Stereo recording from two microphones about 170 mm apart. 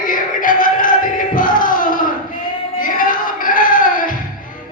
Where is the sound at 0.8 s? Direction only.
50° left (ahead or behind).